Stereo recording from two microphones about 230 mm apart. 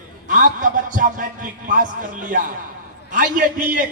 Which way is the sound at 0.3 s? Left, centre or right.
Right.